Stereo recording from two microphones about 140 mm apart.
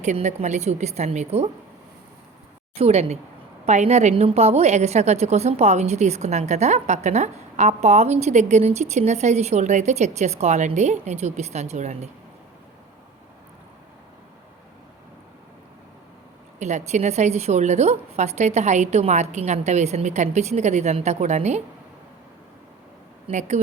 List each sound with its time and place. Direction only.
0.0 s a woman's voice: 55° right (ahead or behind)
2.7 s a woman's voice: 50° right (ahead or behind)
16.6 s a woman's voice: 55° right (ahead or behind)
23.3 s a woman's voice: 60° right (ahead or behind)